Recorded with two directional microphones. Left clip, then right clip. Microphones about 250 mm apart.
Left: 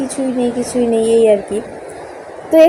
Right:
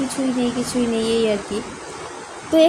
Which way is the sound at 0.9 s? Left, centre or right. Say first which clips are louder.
Left 10 dB; centre.